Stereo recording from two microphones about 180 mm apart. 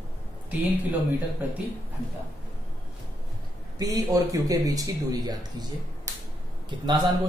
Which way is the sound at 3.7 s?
20° right (ahead or behind).